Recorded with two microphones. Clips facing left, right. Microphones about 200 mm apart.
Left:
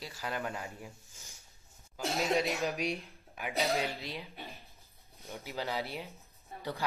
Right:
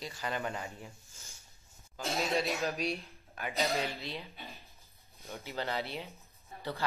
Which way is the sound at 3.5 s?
Centre (ahead or behind).